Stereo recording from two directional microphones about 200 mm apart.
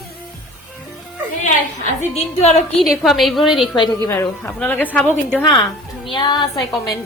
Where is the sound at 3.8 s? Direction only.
15° left (ahead or behind).